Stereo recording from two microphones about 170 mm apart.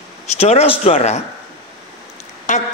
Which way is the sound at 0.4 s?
35° left (ahead or behind).